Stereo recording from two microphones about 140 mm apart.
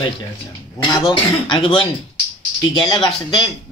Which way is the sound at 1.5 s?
40° left (ahead or behind).